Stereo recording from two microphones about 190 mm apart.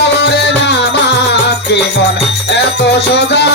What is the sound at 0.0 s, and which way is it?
Music, 60° left (ahead or behind).